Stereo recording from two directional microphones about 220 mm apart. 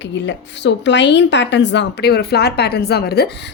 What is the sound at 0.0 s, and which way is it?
Speech, 55° left (ahead or behind).